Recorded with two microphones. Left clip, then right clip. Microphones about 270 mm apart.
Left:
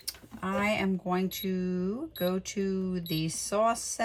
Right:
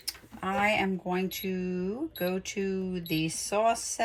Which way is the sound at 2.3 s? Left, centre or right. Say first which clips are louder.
Even; centre.